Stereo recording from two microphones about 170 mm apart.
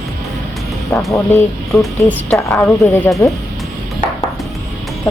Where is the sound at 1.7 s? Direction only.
Centre (ahead or behind).